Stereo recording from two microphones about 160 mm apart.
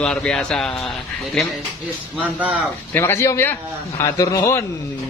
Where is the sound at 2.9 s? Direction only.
15° left (ahead or behind).